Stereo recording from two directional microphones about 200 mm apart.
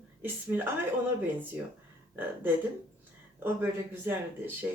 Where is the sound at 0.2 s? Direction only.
10° right (ahead or behind).